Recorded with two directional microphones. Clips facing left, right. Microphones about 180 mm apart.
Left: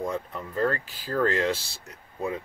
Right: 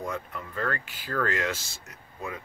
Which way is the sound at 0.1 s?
35° left (ahead or behind).